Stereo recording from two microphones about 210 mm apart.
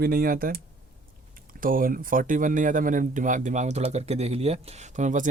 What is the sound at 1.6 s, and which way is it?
Speech, 40° right (ahead or behind).